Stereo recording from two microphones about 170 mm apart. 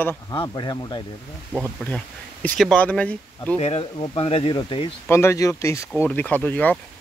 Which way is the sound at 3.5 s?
35° left (ahead or behind).